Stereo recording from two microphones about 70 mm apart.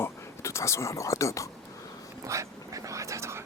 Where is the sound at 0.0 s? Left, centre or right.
Left.